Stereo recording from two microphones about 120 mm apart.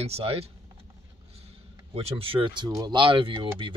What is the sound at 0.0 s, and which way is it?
Speech, 55° right (ahead or behind).